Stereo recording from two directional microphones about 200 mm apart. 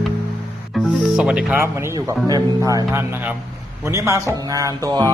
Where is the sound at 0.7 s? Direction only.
Centre (ahead or behind).